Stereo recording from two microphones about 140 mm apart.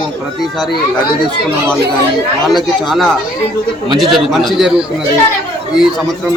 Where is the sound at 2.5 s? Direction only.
Centre (ahead or behind).